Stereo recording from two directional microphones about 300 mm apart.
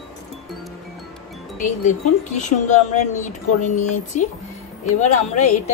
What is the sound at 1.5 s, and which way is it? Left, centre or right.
Speech, left.